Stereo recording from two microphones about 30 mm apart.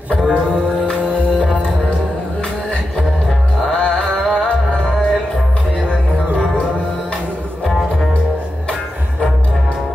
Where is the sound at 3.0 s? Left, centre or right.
Centre.